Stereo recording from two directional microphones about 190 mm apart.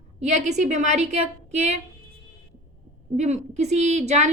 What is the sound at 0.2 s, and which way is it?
A woman's voice, 35° right (ahead or behind).